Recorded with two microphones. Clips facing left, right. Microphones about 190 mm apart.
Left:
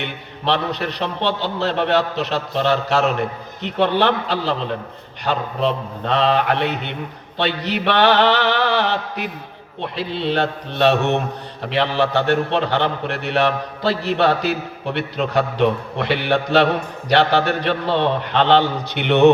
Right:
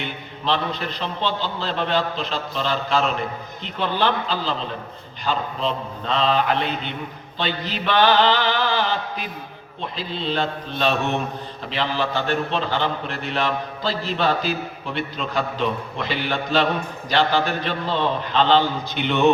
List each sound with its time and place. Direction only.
0.0 s a man's voice: 65° left (ahead or behind)
7.3 s mantra: 70° left (ahead or behind)
9.8 s a man's voice: 65° left (ahead or behind)